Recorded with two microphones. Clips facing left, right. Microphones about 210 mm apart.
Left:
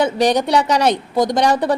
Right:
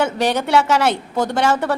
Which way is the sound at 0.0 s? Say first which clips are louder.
Left 3 dB; 15° left (ahead or behind).